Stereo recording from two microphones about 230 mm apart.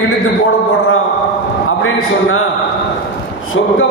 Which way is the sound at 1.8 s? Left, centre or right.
Left.